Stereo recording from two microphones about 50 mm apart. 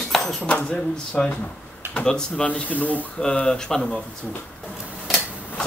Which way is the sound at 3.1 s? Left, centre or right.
Centre.